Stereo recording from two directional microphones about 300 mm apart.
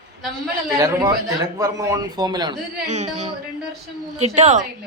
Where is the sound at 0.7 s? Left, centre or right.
Centre.